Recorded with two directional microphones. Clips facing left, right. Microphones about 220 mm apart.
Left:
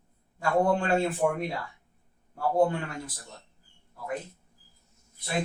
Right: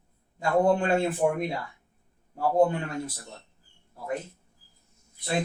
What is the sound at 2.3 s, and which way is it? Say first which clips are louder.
Speech: right 2 dB; 20° right (ahead or behind).